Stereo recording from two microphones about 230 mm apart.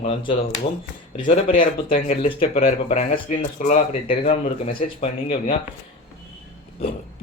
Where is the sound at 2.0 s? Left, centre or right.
Left.